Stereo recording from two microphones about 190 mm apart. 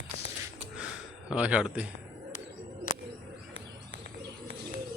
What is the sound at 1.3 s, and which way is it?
Speech, 5° right (ahead or behind).